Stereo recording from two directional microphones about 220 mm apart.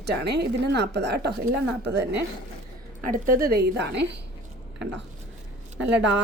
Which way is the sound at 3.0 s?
40° right (ahead or behind).